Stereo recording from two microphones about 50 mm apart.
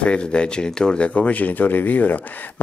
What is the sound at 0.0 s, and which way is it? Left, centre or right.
Speech, left.